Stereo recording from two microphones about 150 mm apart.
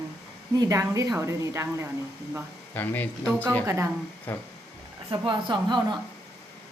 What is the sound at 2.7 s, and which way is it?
Speech, 10° left (ahead or behind).